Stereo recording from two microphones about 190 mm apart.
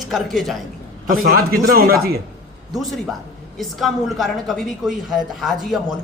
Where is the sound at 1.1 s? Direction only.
50° right (ahead or behind).